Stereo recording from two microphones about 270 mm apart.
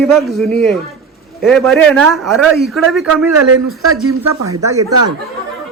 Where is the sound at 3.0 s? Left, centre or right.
Right.